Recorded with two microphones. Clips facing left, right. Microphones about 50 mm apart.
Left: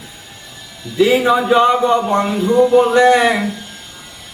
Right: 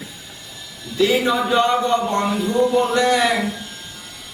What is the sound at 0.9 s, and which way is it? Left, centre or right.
Speech, centre.